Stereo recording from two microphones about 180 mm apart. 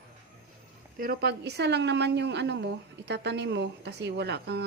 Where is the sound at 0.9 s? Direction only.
55° right (ahead or behind).